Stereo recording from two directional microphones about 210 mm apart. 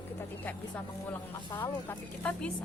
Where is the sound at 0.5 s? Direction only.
10° left (ahead or behind).